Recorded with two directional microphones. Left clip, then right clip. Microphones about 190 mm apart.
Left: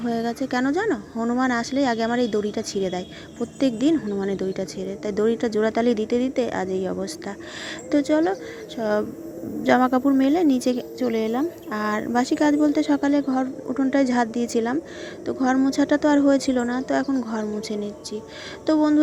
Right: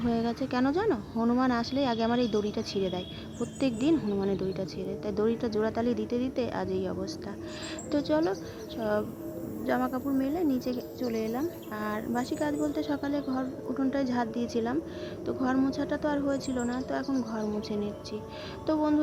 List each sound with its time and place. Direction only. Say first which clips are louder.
0.0 s speech: left 5 dB; 20° left (ahead or behind)